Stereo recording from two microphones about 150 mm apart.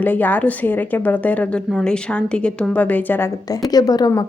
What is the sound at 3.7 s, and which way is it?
Speech, 25° left (ahead or behind).